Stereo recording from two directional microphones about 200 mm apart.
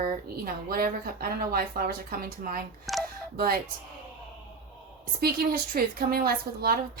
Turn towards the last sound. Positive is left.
turn(degrees=-50)  # may be behind; listen again after turning